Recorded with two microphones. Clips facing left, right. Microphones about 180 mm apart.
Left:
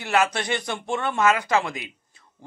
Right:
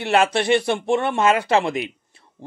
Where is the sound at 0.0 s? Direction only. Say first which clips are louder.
Right 4 dB; 25° right (ahead or behind).